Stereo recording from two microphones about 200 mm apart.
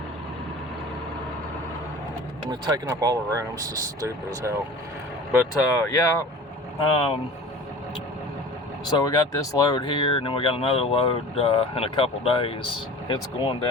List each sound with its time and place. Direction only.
2.5 s speech: 20° right (ahead or behind)
5.7 s speech: 15° left (ahead or behind)
6.7 s speech: 25° left (ahead or behind)
8.9 s speech: 20° left (ahead or behind)